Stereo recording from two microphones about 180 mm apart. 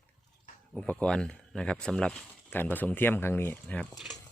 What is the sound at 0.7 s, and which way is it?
Speech, 5° left (ahead or behind).